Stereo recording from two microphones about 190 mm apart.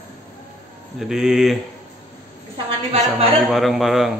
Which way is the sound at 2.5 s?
25° right (ahead or behind).